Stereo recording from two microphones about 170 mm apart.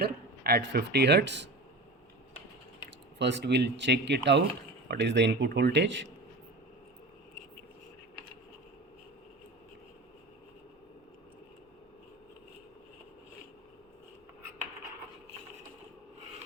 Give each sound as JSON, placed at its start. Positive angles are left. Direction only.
{"t": 0.0, "sound": "speech", "side_deg": -65}
{"t": 3.2, "sound": "speech", "side_deg": -90}